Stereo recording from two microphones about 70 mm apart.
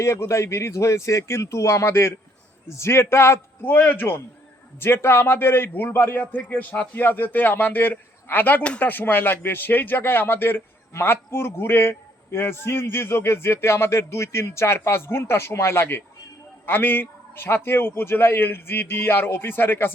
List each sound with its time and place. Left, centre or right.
0.0 s a man's voice: left
8.6 s speech: centre
8.9 s speech: left